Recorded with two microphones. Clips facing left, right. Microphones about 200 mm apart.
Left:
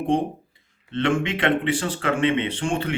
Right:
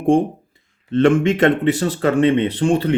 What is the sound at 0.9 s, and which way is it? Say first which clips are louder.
Speech: right 8 dB; 45° right (ahead or behind).